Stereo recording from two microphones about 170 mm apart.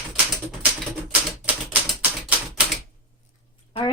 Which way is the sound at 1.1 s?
10° right (ahead or behind).